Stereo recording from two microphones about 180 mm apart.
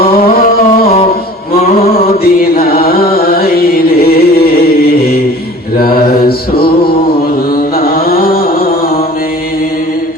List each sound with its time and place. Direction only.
0.0 s music: 55° left (ahead or behind)
2.4 s music: 55° left (ahead or behind)
5.7 s mantra: 55° left (ahead or behind)
7.9 s a sound: 55° left (ahead or behind)